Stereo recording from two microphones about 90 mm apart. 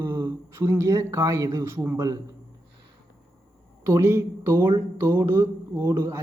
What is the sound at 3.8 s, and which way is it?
Speech, 30° right (ahead or behind).